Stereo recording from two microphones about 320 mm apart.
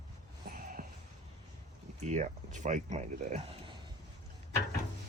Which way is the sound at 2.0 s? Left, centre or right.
Right.